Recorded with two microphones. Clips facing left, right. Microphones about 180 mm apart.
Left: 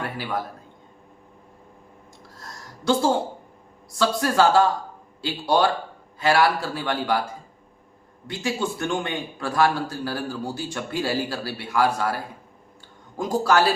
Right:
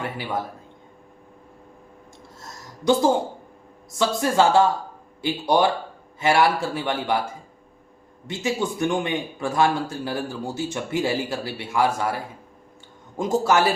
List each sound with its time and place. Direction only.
0.0 s a man's voice: 20° right (ahead or behind)
2.4 s a sound: 20° right (ahead or behind)
3.9 s a man's voice: 20° right (ahead or behind)
8.3 s a man's voice: 20° right (ahead or behind)